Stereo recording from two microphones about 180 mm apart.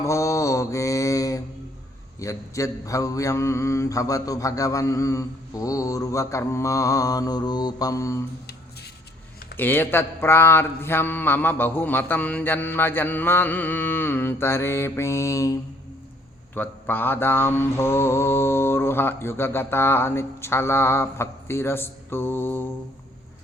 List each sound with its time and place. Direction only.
0.0 s mantra: 15° left (ahead or behind)
9.6 s mantra: 10° left (ahead or behind)
16.6 s mantra: 10° left (ahead or behind)